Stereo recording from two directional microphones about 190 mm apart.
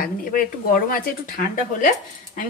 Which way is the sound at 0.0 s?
45° left (ahead or behind).